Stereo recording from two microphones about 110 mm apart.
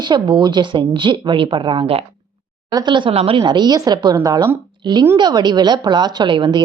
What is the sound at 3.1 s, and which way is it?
Speech, 65° right (ahead or behind).